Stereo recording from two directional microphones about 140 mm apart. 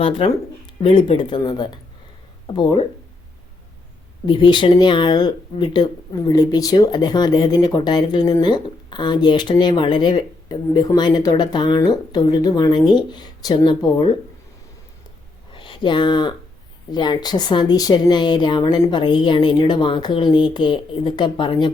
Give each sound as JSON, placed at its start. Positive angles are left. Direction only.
{"t": 0.8, "sound": "speech", "side_deg": 40}
{"t": 4.3, "sound": "speech", "side_deg": 35}
{"t": 15.5, "sound": "speech", "side_deg": 35}